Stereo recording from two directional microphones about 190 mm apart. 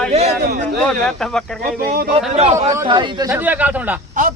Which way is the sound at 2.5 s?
15° right (ahead or behind).